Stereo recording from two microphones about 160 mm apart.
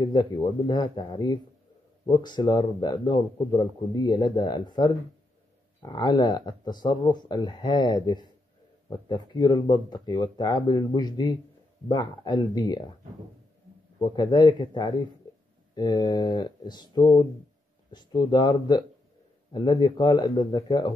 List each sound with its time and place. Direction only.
0.0 s speech: 25° left (ahead or behind)
14.0 s speech: 25° left (ahead or behind)